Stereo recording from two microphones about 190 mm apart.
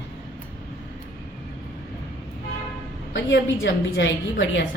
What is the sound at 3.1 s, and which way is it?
A woman's voice, 75° left (ahead or behind).